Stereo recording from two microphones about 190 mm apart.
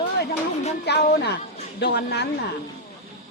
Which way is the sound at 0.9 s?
60° left (ahead or behind).